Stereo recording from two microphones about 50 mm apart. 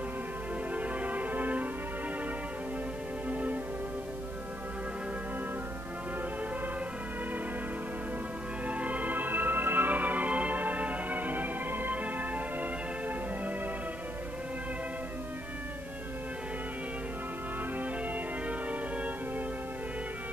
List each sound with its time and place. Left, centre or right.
0.7 s music: right
3.3 s music: right
8.6 s music: right
18.5 s music: right